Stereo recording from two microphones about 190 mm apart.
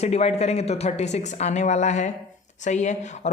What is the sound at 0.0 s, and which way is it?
Speech, 35° left (ahead or behind).